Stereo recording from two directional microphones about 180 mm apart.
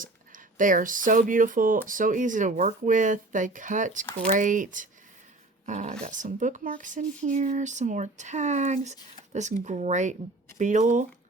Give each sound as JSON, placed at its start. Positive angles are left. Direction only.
{"t": 0.0, "sound": "speech", "side_deg": -50}